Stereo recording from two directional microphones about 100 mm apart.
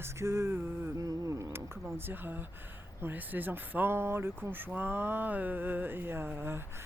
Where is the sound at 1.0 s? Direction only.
30° right (ahead or behind).